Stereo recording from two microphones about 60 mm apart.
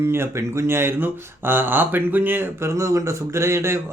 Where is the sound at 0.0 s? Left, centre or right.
Right.